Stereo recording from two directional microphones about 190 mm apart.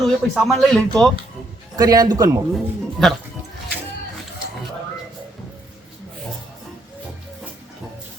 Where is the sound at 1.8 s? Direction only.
20° right (ahead or behind).